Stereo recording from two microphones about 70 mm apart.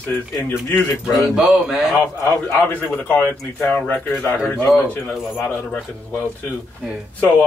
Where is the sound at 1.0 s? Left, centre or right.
Centre.